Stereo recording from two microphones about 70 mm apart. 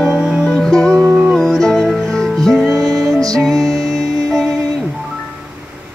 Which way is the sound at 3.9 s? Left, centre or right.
Centre.